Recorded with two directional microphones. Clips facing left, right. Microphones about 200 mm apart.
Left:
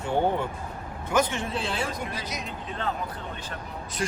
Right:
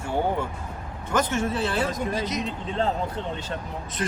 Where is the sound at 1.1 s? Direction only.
15° left (ahead or behind).